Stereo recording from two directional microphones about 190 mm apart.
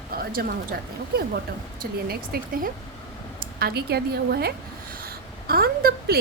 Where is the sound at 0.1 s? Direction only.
50° right (ahead or behind).